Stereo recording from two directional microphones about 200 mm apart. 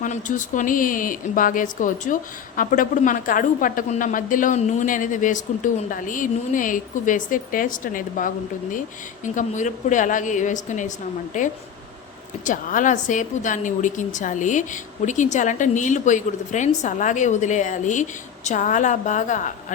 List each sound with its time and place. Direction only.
0.0 s a woman's voice: 40° left (ahead or behind)